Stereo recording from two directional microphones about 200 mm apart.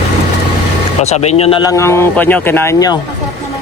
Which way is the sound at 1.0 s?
35° left (ahead or behind).